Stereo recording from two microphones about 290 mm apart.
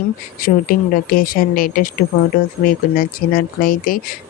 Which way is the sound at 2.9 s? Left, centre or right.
Left.